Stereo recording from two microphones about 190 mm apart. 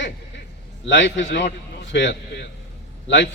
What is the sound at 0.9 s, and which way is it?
A man's voice, 70° left (ahead or behind).